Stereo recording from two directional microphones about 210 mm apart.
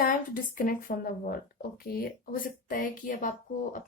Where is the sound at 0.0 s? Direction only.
40° left (ahead or behind).